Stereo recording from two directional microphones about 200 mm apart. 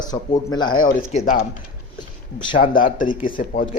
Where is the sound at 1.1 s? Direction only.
35° left (ahead or behind).